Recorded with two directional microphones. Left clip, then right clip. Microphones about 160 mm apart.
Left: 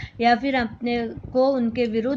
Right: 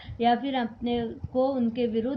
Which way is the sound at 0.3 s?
50° left (ahead or behind).